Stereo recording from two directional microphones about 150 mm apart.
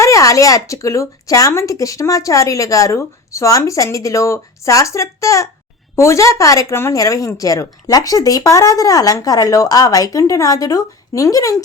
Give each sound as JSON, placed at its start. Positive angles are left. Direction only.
{"t": 0.0, "sound": "speech", "side_deg": 20}